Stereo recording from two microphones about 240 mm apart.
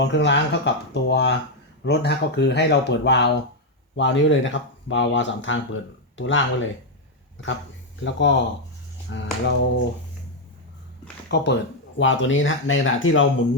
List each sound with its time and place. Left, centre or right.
0.0 s speech: left
8.0 s speech: left
11.3 s speech: left